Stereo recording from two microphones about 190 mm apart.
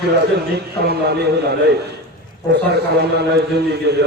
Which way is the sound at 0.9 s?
60° right (ahead or behind).